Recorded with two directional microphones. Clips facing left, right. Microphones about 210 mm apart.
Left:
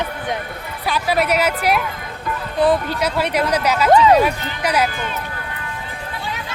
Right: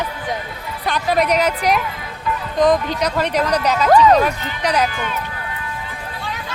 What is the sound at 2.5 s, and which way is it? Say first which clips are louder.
Speech: right 1 dB; 15° right (ahead or behind).